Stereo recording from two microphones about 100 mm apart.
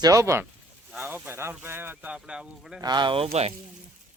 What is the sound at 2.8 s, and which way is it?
Speech, 50° right (ahead or behind).